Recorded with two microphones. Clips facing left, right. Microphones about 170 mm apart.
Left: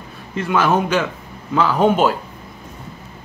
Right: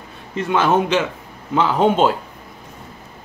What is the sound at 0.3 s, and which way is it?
A man's voice, 25° right (ahead or behind).